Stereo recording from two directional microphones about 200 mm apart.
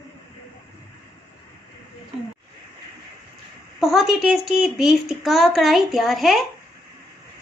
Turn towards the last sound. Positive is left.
turn(degrees=0)  # may be behind; listen again after turning